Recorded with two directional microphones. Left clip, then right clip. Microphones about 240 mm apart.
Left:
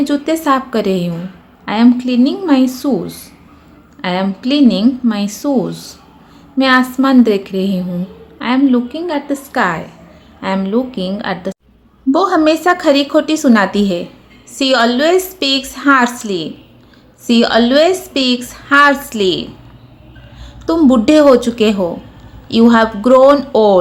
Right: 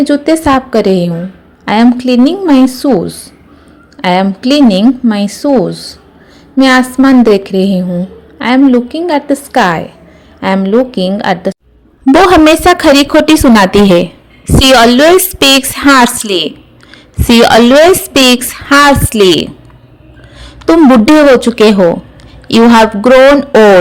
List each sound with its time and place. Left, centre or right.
0.0 s a woman's voice: right